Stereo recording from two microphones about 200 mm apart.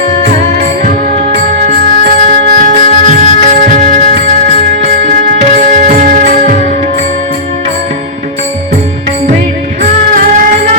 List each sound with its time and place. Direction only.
0.9 s music: 40° right (ahead or behind)